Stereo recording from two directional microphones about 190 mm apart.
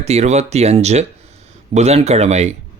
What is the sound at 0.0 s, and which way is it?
Speech, 35° right (ahead or behind).